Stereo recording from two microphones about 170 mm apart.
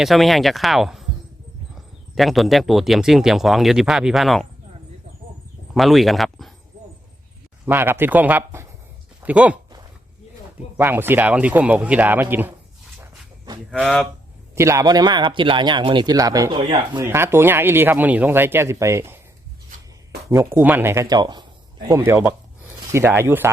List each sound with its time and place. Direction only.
0.0 s speech: centre (ahead or behind)
5.7 s speech: centre (ahead or behind)
7.6 s speech: 15° right (ahead or behind)
10.8 s speech: 10° right (ahead or behind)
13.7 s speech: centre (ahead or behind)
14.5 s speech: 15° right (ahead or behind)
16.6 s speech: 30° right (ahead or behind)
17.0 s speech: 15° right (ahead or behind)
20.3 s speech: 15° right (ahead or behind)